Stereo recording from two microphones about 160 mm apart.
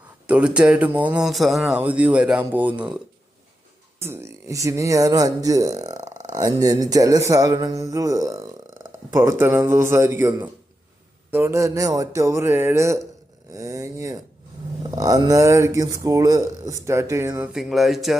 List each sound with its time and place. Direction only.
0.3 s speech: 10° right (ahead or behind)
4.0 s speech: 15° right (ahead or behind)
17.5 s speech: centre (ahead or behind)